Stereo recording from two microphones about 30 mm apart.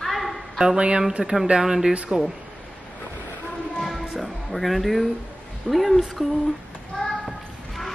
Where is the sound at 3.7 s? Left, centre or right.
Centre.